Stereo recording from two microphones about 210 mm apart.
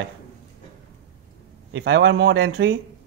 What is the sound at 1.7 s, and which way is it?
Speech, 60° right (ahead or behind).